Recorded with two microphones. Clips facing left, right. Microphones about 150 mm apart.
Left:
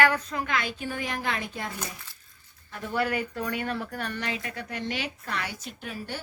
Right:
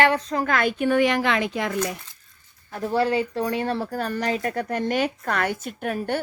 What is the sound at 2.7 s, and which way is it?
Speech, 35° right (ahead or behind).